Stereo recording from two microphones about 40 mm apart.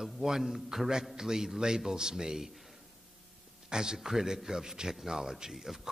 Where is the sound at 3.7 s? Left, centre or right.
Centre.